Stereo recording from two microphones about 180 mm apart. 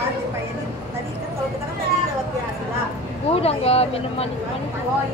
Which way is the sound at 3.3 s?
35° left (ahead or behind).